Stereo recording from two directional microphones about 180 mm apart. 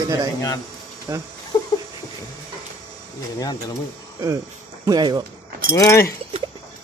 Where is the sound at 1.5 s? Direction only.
20° left (ahead or behind).